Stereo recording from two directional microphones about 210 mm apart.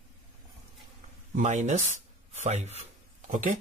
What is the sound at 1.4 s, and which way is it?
Speech, 35° right (ahead or behind).